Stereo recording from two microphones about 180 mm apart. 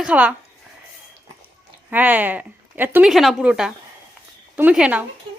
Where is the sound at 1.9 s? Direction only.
10° right (ahead or behind).